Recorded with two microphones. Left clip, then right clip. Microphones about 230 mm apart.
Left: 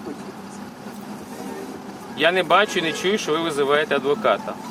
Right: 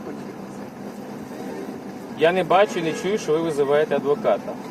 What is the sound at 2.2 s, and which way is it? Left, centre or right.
Speech, left.